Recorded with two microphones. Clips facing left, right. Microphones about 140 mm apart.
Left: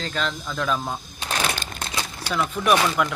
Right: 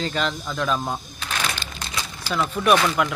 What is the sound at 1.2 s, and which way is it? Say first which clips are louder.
Shuffling cards: left 2 dB; 35° left (ahead or behind).